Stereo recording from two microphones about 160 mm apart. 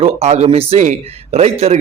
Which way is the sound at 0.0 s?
45° right (ahead or behind).